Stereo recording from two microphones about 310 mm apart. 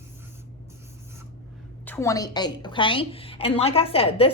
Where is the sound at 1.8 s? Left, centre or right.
Centre.